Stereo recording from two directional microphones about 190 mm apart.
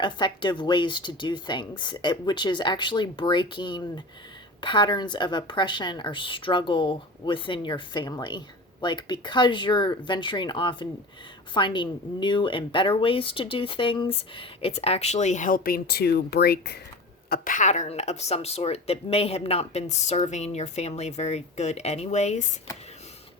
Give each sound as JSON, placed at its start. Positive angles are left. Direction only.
{"t": 0.0, "sound": "a woman's voice", "side_deg": 25}